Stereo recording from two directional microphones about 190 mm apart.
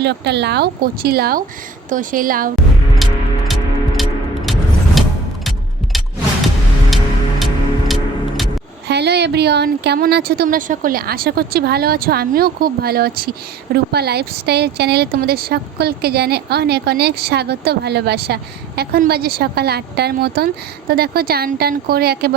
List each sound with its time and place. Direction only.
0.0 s a woman's voice: 60° right (ahead or behind)
3.0 s music: centre (ahead or behind)
6.9 s music: centre (ahead or behind)
8.9 s a woman's voice: 60° right (ahead or behind)